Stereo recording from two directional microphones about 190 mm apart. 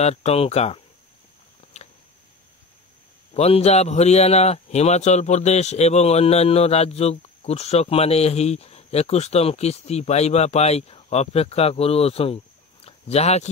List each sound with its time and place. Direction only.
0.0 s a man's voice: 35° left (ahead or behind)
1.8 s a sound: 35° left (ahead or behind)
3.3 s a man's voice: 35° left (ahead or behind)